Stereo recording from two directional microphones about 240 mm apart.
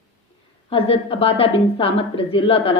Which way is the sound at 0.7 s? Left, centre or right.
Left.